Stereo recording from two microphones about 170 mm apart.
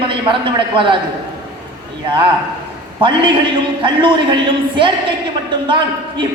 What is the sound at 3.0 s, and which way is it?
A man's voice, 30° right (ahead or behind).